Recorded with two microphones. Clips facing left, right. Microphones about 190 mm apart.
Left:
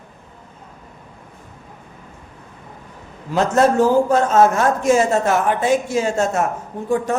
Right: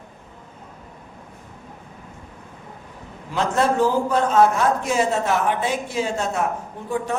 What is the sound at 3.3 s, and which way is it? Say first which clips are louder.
A man's voice: left 5 dB; 45° left (ahead or behind).